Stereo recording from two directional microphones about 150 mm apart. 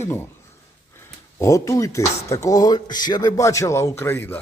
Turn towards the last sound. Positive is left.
turn(degrees=15)  # may be behind; listen again after turning